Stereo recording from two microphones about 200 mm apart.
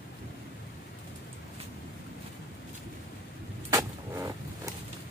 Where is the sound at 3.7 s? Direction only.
15° right (ahead or behind).